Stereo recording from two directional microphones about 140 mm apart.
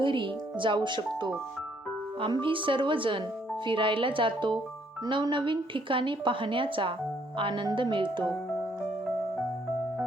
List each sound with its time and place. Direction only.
0.0 s a woman's voice: 35° right (ahead or behind)